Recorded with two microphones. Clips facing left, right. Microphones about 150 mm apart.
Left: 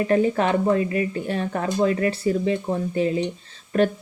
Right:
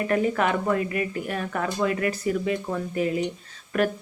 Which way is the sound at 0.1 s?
30° left (ahead or behind).